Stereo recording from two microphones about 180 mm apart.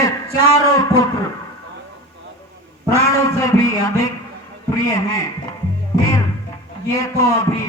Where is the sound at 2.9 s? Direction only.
15° left (ahead or behind).